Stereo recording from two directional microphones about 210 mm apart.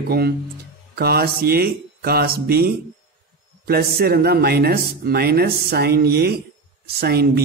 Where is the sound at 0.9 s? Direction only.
50° right (ahead or behind).